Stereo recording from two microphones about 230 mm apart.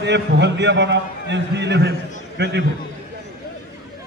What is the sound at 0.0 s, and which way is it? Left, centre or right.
A man's voice, right.